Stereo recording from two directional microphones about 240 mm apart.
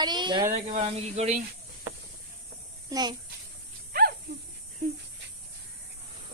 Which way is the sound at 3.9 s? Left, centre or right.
Right.